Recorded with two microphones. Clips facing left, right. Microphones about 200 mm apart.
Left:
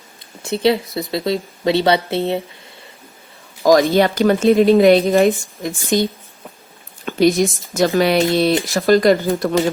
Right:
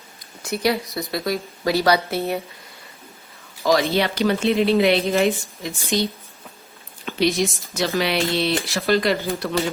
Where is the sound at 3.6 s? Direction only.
50° left (ahead or behind).